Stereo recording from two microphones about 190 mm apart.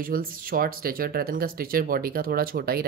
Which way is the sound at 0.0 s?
50° right (ahead or behind).